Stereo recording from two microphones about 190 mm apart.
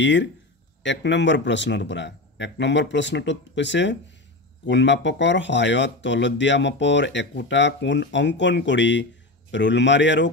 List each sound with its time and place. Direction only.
0.0 s speech: 70° left (ahead or behind)